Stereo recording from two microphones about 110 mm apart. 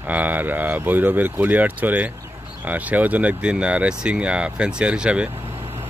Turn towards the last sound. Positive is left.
turn(degrees=-10)  # may be behind; listen again after turning